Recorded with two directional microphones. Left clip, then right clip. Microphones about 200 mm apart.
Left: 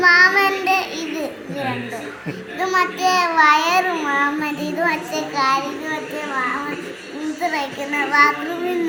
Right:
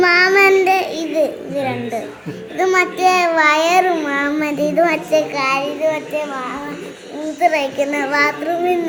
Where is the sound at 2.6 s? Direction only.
60° right (ahead or behind).